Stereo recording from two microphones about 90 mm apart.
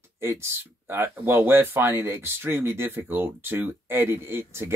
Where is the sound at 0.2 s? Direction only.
30° right (ahead or behind).